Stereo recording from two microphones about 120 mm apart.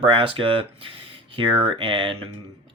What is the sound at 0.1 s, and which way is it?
Speech, 50° right (ahead or behind).